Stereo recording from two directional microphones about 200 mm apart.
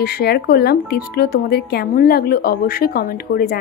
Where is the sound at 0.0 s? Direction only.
55° left (ahead or behind).